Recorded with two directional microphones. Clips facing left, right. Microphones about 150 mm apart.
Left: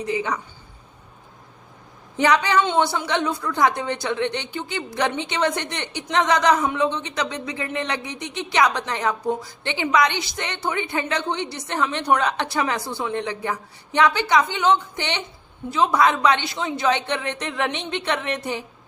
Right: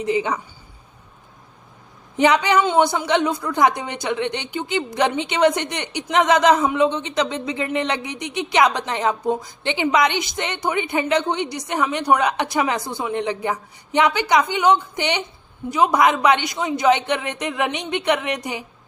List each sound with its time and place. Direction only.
0.0 s speech: 20° right (ahead or behind)
2.1 s a woman's voice: 20° right (ahead or behind)